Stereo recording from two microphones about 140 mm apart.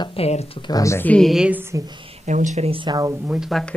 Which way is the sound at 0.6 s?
30° left (ahead or behind).